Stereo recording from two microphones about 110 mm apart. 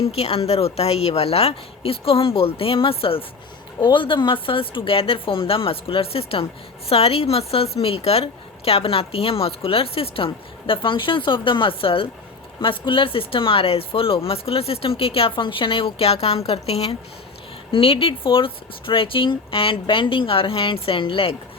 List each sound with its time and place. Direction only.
0.0 s a woman's voice: 65° left (ahead or behind)
3.8 s a woman's voice: 45° left (ahead or behind); by 17.0 s 65° left (ahead or behind)
17.7 s speech: 55° left (ahead or behind)